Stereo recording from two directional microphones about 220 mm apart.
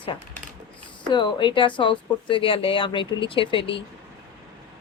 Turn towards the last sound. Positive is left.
turn(degrees=25)  # may be behind; listen again after turning